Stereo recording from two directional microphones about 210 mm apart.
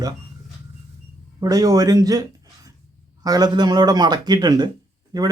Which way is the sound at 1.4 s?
15° right (ahead or behind).